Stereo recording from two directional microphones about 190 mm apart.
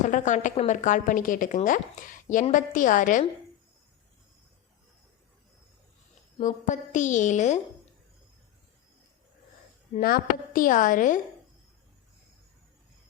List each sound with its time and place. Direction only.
0.0 s a woman's voice: 40° left (ahead or behind)
6.4 s a woman's voice: 40° left (ahead or behind)
9.9 s a woman's voice: 45° left (ahead or behind)